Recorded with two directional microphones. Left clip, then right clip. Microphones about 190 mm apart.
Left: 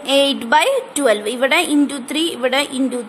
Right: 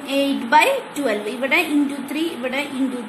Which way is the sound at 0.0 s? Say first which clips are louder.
Left 6 dB; 40° left (ahead or behind).